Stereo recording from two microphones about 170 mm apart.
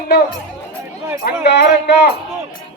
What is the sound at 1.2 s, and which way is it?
Speech, 85° left.